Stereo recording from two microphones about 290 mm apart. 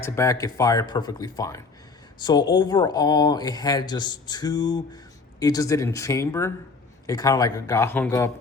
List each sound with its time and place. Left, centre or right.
0.0 s speech: centre